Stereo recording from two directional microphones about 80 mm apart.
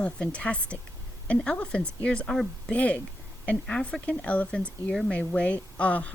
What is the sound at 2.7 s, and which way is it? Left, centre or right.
Speech, centre.